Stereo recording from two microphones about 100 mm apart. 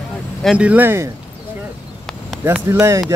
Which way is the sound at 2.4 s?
25° right (ahead or behind).